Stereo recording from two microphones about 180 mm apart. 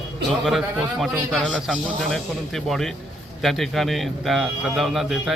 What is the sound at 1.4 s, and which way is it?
A man's voice, centre (ahead or behind).